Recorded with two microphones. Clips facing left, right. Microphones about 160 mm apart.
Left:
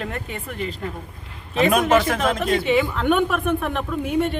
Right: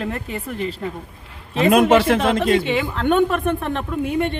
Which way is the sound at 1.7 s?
60° right (ahead or behind).